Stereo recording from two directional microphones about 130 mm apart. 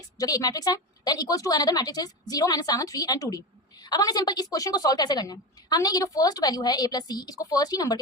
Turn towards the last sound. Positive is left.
turn(degrees=30)  # may be behind; listen again after turning